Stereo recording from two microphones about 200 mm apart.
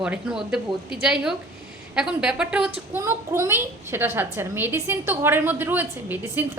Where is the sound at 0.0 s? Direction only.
5° right (ahead or behind).